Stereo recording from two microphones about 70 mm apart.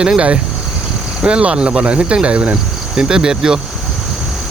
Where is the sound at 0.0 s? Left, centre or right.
Centre.